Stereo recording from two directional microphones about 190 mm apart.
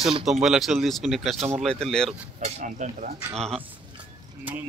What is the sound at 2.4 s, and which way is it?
Speech, 40° right (ahead or behind).